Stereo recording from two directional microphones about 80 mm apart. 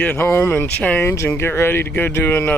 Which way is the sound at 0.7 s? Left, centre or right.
Centre.